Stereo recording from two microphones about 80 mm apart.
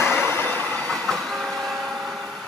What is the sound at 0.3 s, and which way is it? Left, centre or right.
Train, left.